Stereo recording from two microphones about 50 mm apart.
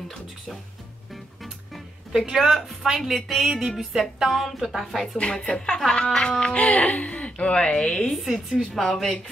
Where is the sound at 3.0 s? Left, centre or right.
Centre.